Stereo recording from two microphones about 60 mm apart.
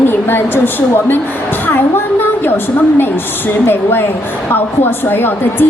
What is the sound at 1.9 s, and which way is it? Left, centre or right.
A woman's voice, left.